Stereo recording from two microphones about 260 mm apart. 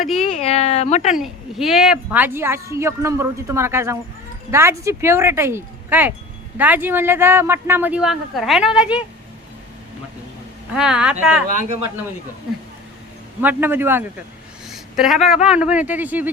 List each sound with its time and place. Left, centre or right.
0.0 s speech: centre
0.3 s speech: left
1.1 s a woman's voice: centre
10.8 s speech: centre
11.4 s speech: right
13.4 s a woman's voice: centre